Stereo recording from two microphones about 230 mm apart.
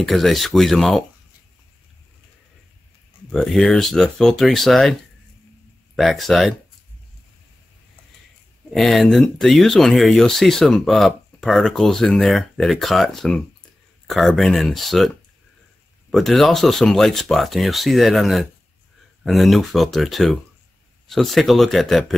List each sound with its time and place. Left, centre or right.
0.0 s speech: centre
3.3 s speech: centre
5.9 s speech: centre
8.6 s speech: centre